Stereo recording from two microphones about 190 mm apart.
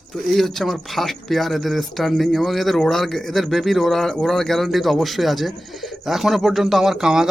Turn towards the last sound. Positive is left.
turn(degrees=-5)  # may be behind; listen again after turning